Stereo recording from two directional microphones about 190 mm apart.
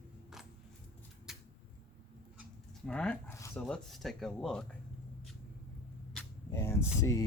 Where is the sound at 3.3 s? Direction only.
15° left (ahead or behind).